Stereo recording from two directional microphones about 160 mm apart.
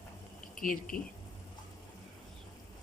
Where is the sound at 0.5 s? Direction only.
60° left (ahead or behind).